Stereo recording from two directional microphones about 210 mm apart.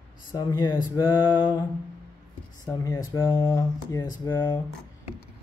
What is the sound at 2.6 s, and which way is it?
Speech, 15° left (ahead or behind).